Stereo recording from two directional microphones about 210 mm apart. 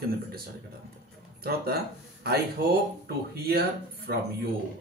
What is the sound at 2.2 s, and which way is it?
Speech, 50° right (ahead or behind).